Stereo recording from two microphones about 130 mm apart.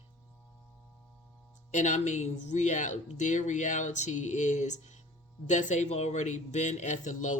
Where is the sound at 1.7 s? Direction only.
65° left (ahead or behind).